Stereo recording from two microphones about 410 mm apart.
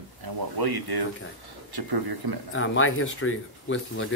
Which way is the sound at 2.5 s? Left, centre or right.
Left.